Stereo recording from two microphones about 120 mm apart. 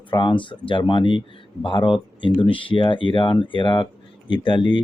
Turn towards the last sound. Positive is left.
turn(degrees=40)  # may be behind; listen again after turning